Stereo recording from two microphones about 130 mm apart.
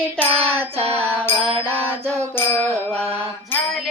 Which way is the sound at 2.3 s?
15° left (ahead or behind).